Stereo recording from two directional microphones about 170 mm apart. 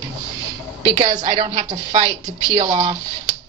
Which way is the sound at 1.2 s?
25° right (ahead or behind).